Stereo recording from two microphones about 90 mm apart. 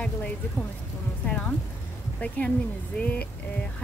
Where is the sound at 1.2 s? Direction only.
15° left (ahead or behind).